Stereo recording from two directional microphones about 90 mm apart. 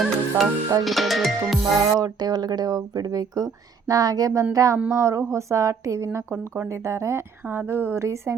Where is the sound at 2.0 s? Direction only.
50° right (ahead or behind).